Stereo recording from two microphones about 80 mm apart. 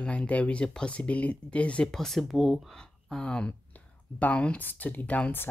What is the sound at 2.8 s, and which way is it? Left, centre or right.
Speech, centre.